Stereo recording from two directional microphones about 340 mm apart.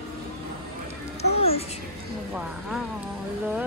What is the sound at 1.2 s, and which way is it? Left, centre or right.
Music, centre.